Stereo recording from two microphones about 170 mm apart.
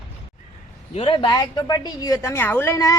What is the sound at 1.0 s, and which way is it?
A woman's voice, 30° left (ahead or behind).